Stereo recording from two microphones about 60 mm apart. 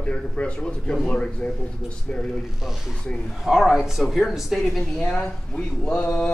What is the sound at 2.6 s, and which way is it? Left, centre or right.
Speech, centre.